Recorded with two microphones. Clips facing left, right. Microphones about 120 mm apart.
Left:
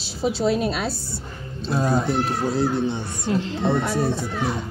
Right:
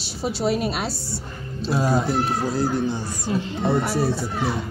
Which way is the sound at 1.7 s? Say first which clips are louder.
Even; 5° right (ahead or behind).